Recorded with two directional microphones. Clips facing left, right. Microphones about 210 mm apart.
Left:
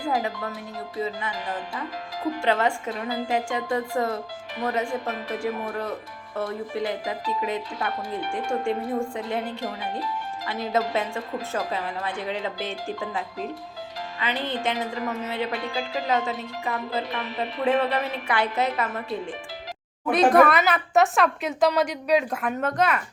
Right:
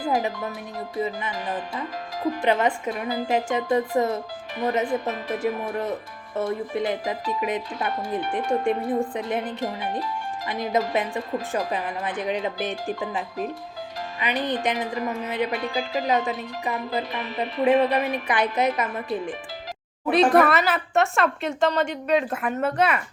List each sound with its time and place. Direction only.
0.1 s speech: 20° right (ahead or behind)
20.1 s a woman's voice: centre (ahead or behind)